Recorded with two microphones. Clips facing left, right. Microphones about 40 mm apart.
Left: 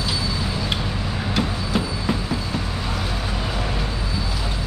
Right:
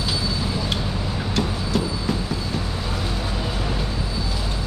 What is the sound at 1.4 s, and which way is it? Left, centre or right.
Vehicle, centre.